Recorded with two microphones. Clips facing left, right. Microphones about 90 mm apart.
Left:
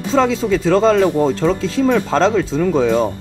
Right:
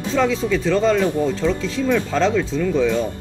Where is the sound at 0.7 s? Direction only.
80° left.